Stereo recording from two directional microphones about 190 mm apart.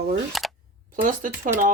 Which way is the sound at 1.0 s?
45° right (ahead or behind).